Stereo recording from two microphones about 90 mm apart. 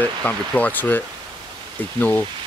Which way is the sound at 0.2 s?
15° left (ahead or behind).